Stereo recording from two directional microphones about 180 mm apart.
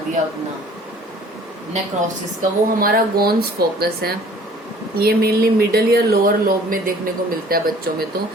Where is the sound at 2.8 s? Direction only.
55° right (ahead or behind).